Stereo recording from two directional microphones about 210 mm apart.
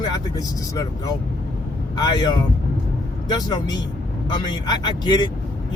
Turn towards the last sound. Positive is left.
turn(degrees=20)  # may be behind; listen again after turning